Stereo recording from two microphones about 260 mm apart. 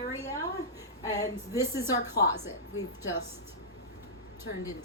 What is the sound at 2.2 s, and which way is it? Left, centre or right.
Speech, left.